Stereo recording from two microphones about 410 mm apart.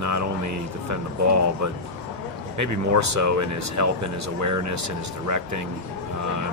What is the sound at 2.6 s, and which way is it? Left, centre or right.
Speech, right.